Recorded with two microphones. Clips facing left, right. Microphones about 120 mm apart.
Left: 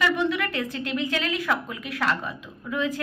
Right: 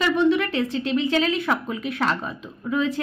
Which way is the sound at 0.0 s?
25° right (ahead or behind).